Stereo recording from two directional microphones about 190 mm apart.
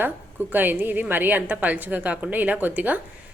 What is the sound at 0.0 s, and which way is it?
A woman's voice, 10° right (ahead or behind).